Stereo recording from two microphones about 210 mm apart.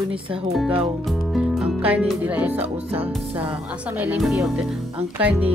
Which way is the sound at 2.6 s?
30° right (ahead or behind).